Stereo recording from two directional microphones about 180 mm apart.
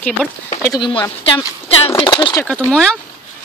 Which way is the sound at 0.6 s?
25° left (ahead or behind).